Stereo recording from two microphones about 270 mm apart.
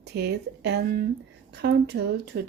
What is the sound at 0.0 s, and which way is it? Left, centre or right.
Speech, right.